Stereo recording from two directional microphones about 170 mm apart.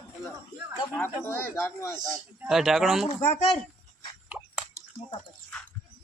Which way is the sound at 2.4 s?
5° right (ahead or behind).